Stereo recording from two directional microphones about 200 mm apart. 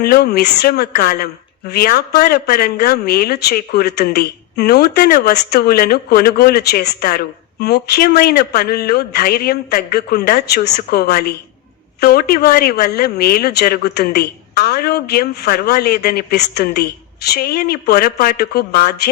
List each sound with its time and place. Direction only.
0.0 s speech: 50° left (ahead or behind)